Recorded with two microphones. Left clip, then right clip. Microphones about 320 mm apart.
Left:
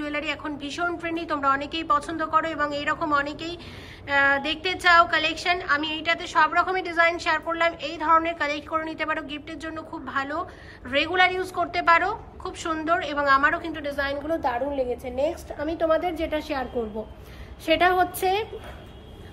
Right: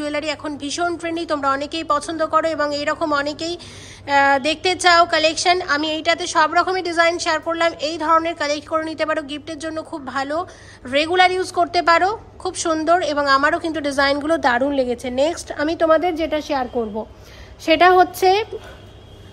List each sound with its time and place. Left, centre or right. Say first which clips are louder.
0.0 s a woman's voice: right 5 dB; centre; by 16.6 s right
17.6 s a woman's voice: right 8 dB; right